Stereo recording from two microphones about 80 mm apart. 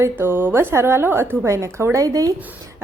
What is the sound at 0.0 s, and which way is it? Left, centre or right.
A woman's voice, right.